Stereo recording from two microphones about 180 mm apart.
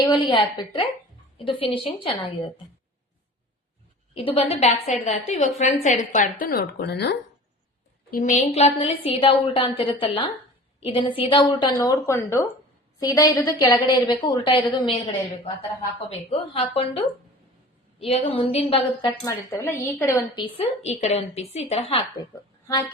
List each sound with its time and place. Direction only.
0.3 s a woman's voice: 25° left (ahead or behind)
4.1 s a woman's voice: 30° left (ahead or behind)
6.4 s speech: 55° left (ahead or behind)
8.1 s a woman's voice: 45° left (ahead or behind); by 14.9 s 25° left (ahead or behind)
16.0 s a woman's voice: 30° left (ahead or behind)
19.0 s a woman's voice: 20° left (ahead or behind)
20.9 s a woman's voice: 35° left (ahead or behind)
22.2 s a woman's voice: 20° left (ahead or behind)